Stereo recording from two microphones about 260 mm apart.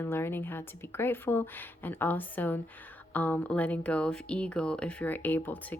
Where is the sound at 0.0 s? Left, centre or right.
Centre.